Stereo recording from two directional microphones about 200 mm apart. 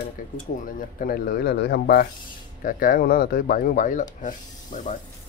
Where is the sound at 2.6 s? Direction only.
45° left (ahead or behind).